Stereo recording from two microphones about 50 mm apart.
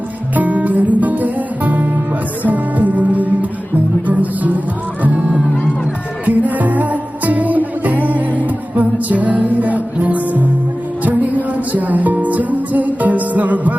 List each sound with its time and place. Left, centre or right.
0.3 s music: right